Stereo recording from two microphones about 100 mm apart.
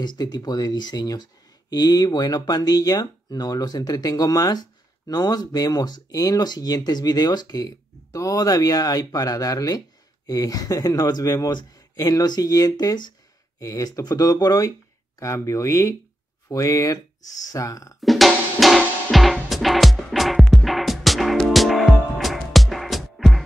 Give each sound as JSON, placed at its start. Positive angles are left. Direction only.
{"t": 0.0, "sound": "speech", "side_deg": 45}
{"t": 13.6, "sound": "speech", "side_deg": 35}
{"t": 18.0, "sound": "music", "side_deg": 0}